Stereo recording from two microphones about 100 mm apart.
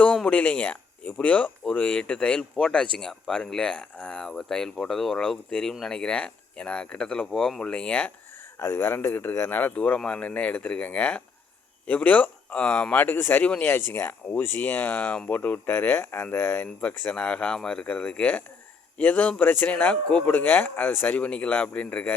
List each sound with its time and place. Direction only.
0.3 s speech: 15° left (ahead or behind)
8.5 s speech: 25° left (ahead or behind)